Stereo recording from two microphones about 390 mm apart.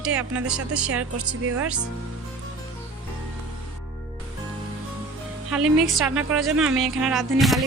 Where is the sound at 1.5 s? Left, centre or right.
Right.